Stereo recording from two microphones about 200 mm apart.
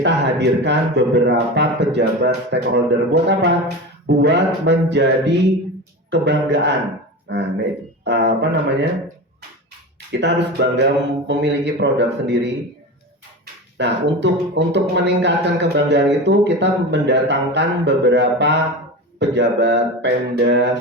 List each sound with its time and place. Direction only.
0.0 s speech: 60° right (ahead or behind)
10.1 s speech: 60° right (ahead or behind)
13.7 s speech: 60° right (ahead or behind)